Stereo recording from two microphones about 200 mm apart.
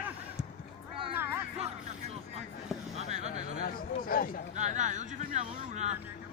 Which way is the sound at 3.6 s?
45° left (ahead or behind).